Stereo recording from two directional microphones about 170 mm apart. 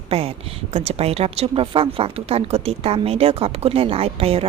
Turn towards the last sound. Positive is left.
turn(degrees=-35)  # may be behind; listen again after turning